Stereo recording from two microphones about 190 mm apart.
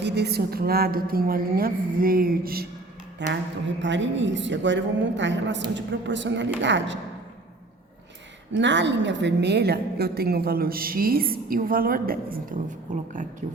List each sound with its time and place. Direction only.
0.0 s a woman's voice: 60° right (ahead or behind)
3.2 s a woman's voice: 70° right (ahead or behind)
8.5 s a woman's voice: 70° right (ahead or behind); by 12.5 s 50° right (ahead or behind)
12.9 s speech: 40° right (ahead or behind)